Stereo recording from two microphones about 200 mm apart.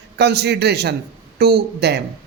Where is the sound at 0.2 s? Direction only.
55° right (ahead or behind).